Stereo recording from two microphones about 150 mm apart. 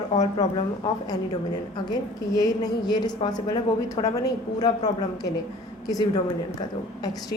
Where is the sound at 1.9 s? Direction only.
25° left (ahead or behind).